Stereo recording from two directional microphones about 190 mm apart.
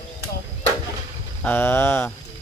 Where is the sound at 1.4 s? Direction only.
10° left (ahead or behind).